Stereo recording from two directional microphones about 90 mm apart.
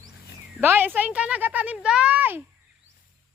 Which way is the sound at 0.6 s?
20° right (ahead or behind).